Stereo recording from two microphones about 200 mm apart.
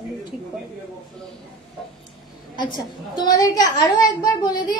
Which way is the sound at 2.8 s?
20° left (ahead or behind).